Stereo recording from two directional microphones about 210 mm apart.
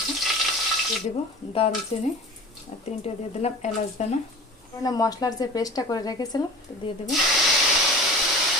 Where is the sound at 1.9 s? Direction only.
30° left (ahead or behind).